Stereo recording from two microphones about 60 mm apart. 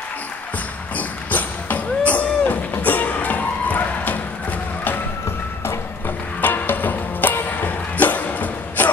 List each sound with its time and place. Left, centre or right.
0.9 s music: left
5.7 s music: left